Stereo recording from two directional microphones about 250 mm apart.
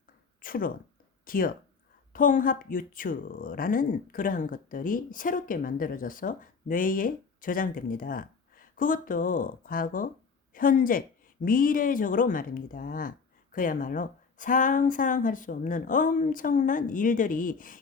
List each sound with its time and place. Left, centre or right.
0.4 s speech: left